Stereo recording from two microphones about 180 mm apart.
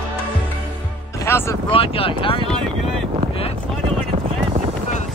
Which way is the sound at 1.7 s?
30° left (ahead or behind).